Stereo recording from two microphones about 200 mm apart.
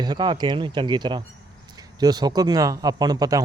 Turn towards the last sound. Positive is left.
turn(degrees=-20)  # may be behind; listen again after turning